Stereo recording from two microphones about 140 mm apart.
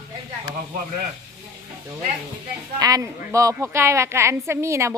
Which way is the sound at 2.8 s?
25° right (ahead or behind).